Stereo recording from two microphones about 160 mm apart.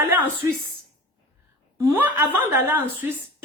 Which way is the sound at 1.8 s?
10° right (ahead or behind).